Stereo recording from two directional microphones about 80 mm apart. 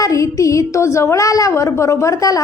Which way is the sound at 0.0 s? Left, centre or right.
Left.